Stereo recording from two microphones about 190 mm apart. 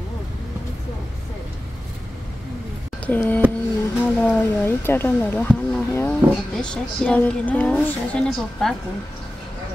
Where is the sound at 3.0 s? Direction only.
10° left (ahead or behind).